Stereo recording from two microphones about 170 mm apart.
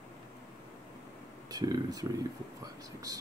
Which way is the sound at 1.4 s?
20° right (ahead or behind).